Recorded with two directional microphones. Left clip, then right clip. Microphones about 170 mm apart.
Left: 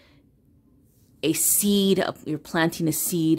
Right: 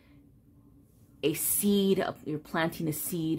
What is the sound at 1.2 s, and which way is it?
Speech, 30° left (ahead or behind).